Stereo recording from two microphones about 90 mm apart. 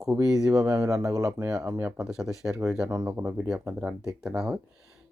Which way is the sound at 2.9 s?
40° right (ahead or behind).